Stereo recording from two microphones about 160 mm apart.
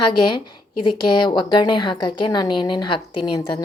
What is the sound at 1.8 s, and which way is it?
Speech, 30° left (ahead or behind).